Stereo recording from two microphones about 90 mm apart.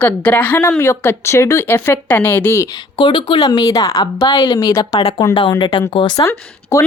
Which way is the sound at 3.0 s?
60° left (ahead or behind).